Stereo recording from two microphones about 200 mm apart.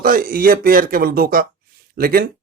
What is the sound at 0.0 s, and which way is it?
Speech, 45° right (ahead or behind).